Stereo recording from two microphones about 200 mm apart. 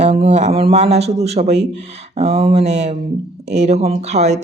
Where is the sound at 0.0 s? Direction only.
30° right (ahead or behind).